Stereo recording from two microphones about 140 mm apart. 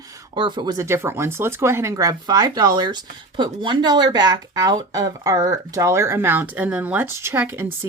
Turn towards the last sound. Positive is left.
turn(degrees=-15)  # may be behind; listen again after turning